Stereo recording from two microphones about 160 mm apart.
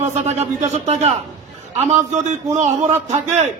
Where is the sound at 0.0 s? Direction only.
45° right (ahead or behind).